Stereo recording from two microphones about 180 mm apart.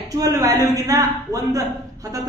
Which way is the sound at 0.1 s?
20° right (ahead or behind).